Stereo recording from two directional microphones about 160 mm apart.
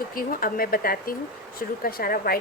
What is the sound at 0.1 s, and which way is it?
Speech, 65° left (ahead or behind).